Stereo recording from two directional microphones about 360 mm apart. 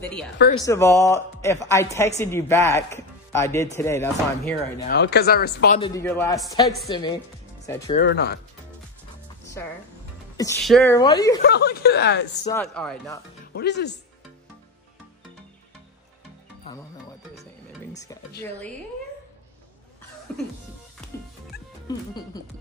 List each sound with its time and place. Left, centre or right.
0.0 s speech: centre
4.8 s speech: left
5.8 s speech: centre
8.0 s speech: left
10.3 s speech: centre
11.4 s speech: left
12.4 s speech: centre
13.5 s speech: left
17.9 s speech: centre
21.8 s speech: centre